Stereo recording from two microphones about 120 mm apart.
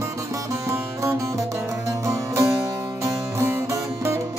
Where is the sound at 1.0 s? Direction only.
25° right (ahead or behind).